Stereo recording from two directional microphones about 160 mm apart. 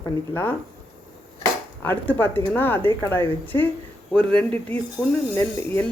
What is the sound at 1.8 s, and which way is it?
Speech, 15° left (ahead or behind).